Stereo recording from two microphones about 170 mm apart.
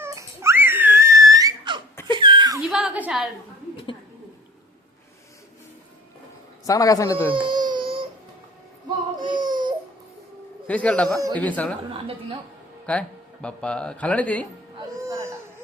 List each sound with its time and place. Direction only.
0.0 s a sound: 15° right (ahead or behind)
2.6 s a sound: 5° right (ahead or behind)
6.7 s a man's voice: 20° left (ahead or behind)
7.3 s baby cry: 30° right (ahead or behind)
9.2 s baby cry: 25° right (ahead or behind)
10.7 s a man's voice: 5° left (ahead or behind)
12.8 s speech: 5° left (ahead or behind)
14.8 s music: 20° right (ahead or behind)